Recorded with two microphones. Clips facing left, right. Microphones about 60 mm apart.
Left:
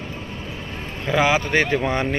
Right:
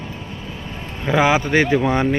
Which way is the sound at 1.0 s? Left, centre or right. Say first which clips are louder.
Right 3 dB; centre.